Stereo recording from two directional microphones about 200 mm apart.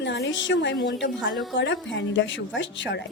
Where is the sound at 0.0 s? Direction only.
60° left (ahead or behind).